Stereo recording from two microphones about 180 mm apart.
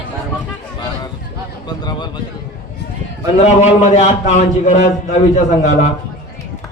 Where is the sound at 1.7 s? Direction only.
25° left (ahead or behind).